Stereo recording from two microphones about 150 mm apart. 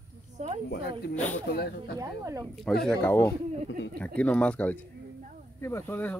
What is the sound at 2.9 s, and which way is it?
Speech, 15° left (ahead or behind).